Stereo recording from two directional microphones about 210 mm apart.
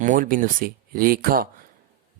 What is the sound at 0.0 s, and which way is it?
Speech, 40° right (ahead or behind).